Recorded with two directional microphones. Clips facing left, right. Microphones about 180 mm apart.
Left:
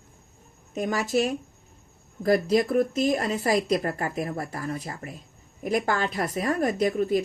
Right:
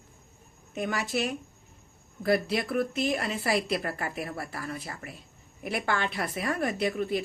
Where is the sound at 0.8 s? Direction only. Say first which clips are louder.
Left 5 dB; 40° left (ahead or behind).